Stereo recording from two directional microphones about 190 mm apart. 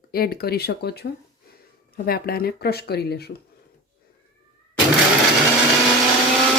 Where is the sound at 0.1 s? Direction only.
50° left (ahead or behind).